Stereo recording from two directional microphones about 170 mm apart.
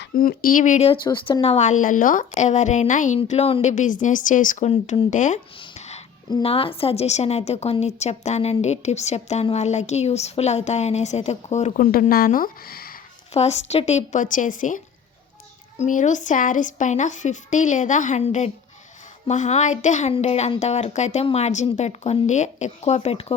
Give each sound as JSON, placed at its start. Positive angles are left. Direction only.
{"t": 0.1, "sound": "a woman's voice", "side_deg": 55}
{"t": 1.0, "sound": "a woman's voice", "side_deg": 30}
{"t": 3.2, "sound": "a woman's voice", "side_deg": 35}
{"t": 4.7, "sound": "a woman's voice", "side_deg": 40}
{"t": 5.5, "sound": "a sound", "side_deg": 40}
{"t": 6.3, "sound": "a woman's voice", "side_deg": 35}
{"t": 13.3, "sound": "a woman's voice", "side_deg": 40}
{"t": 15.8, "sound": "a woman's voice", "side_deg": 45}